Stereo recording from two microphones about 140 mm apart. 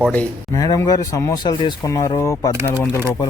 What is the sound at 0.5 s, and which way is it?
Speech, 25° left (ahead or behind).